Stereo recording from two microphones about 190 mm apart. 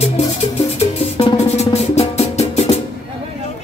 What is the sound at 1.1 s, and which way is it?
Music, 30° left (ahead or behind).